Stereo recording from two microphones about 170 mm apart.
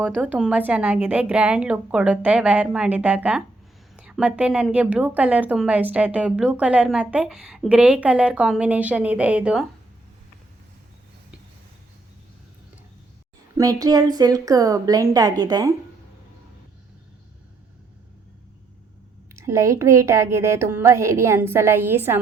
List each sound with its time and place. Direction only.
0.0 s a woman's voice: 10° right (ahead or behind)
13.6 s a woman's voice: 20° right (ahead or behind)
19.4 s a woman's voice: 15° right (ahead or behind)